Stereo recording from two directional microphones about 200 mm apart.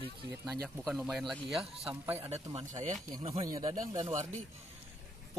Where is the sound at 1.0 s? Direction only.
Centre (ahead or behind).